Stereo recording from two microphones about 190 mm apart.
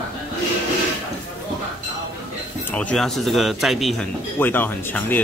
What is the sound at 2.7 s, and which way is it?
Speech, 5° left (ahead or behind).